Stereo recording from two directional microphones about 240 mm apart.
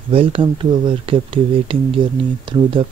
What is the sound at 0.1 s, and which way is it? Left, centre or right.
Speech, right.